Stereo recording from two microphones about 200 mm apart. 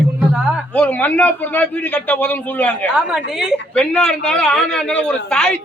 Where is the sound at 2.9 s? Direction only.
Centre (ahead or behind).